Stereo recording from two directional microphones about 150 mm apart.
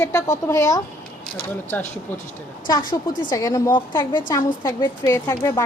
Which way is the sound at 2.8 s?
70° left (ahead or behind).